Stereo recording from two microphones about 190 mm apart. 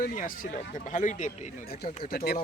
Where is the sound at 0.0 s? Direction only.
45° left (ahead or behind).